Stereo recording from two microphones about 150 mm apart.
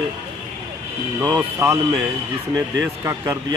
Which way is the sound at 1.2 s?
20° right (ahead or behind).